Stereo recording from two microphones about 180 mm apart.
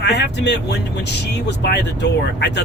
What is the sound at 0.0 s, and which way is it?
Speech, 70° left (ahead or behind).